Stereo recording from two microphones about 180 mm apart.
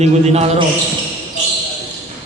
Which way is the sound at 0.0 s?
35° right (ahead or behind).